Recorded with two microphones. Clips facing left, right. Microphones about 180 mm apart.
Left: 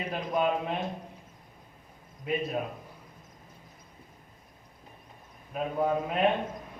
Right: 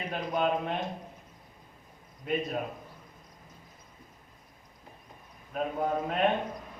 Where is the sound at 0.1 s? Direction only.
5° left (ahead or behind).